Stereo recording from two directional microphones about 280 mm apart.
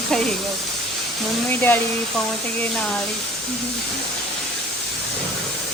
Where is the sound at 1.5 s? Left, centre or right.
Centre.